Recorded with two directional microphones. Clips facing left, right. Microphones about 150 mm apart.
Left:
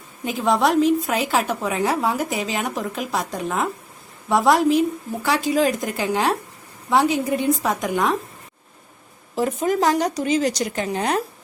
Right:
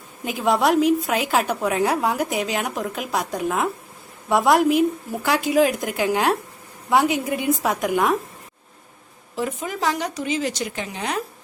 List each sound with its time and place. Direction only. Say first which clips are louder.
0.3 s a woman's voice: even; centre (ahead or behind)
9.3 s speech: left 6 dB; 40° left (ahead or behind)